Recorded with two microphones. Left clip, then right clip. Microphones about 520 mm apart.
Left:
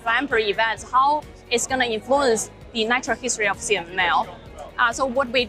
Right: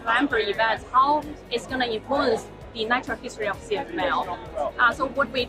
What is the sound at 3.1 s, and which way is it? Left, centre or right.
A woman's voice, left.